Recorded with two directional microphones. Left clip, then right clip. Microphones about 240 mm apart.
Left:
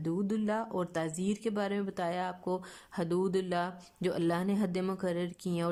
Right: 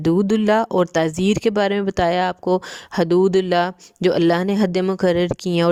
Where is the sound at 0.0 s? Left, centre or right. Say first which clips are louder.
Right 16 dB; right.